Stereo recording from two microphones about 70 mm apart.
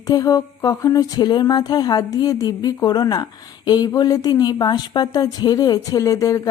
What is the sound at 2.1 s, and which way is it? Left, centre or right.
A woman's voice, left.